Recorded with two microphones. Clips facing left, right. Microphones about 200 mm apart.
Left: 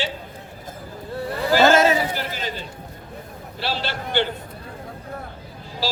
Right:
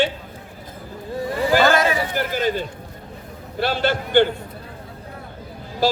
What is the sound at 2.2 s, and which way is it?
Speech, 50° right (ahead or behind).